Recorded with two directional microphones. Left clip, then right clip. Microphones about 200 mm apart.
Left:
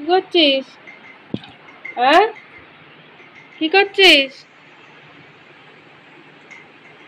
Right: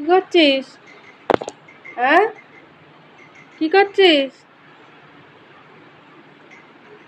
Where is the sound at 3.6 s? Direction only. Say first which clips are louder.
Left 1 dB; 20° right (ahead or behind).